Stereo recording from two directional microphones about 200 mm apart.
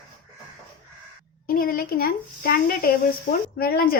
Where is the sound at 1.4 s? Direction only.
45° left (ahead or behind).